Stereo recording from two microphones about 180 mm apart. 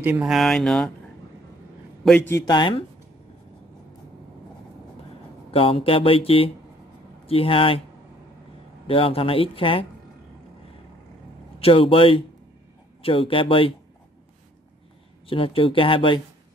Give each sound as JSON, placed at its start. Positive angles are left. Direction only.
{"t": 0.0, "sound": "speech", "side_deg": -5}
{"t": 2.0, "sound": "speech", "side_deg": 10}
{"t": 5.5, "sound": "speech", "side_deg": 30}
{"t": 8.8, "sound": "speech", "side_deg": 30}
{"t": 11.6, "sound": "speech", "side_deg": 30}
{"t": 15.2, "sound": "speech", "side_deg": 30}